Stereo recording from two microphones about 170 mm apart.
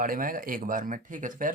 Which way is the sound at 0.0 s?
55° right (ahead or behind).